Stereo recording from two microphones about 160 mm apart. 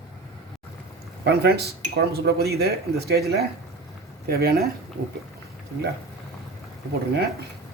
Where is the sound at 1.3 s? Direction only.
90° right.